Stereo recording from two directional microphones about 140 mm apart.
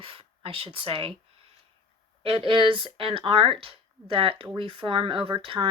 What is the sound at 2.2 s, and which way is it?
Speech, 40° right (ahead or behind).